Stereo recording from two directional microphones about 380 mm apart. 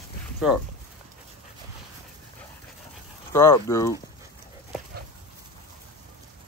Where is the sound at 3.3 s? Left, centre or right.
Centre.